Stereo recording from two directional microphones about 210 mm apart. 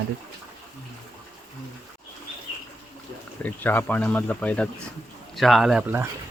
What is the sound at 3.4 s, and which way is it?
Speech, 10° left (ahead or behind).